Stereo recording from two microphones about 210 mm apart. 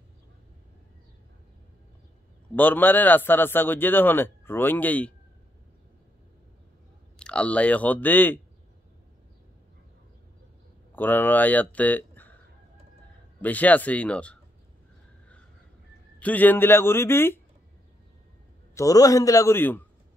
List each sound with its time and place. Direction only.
2.5 s a man's voice: 10° left (ahead or behind)
7.2 s a man's voice: 5° left (ahead or behind)
10.9 s speech: 10° left (ahead or behind)
13.4 s a man's voice: 5° left (ahead or behind)
16.2 s a man's voice: 5° left (ahead or behind)
18.8 s a man's voice: 15° left (ahead or behind)